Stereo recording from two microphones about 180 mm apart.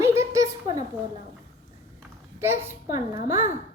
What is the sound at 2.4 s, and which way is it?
A woman's voice, 15° right (ahead or behind).